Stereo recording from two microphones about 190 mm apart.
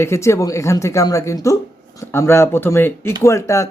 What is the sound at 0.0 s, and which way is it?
Speech, 15° left (ahead or behind).